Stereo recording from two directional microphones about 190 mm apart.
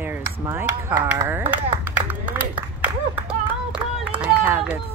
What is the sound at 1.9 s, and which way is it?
Clapping, 10° right (ahead or behind).